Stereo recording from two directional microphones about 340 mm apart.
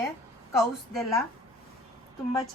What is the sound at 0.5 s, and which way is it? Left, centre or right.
Speech, centre.